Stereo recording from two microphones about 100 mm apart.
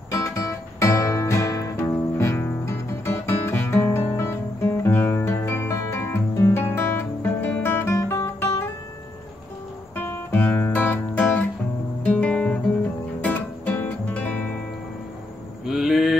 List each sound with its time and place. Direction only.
0.1 s music: 35° left (ahead or behind)
9.9 s guitar: 15° left (ahead or behind)
13.2 s music: 15° left (ahead or behind)
15.6 s mantra: centre (ahead or behind)